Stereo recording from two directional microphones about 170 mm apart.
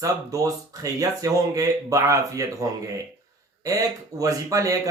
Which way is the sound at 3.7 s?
20° right (ahead or behind).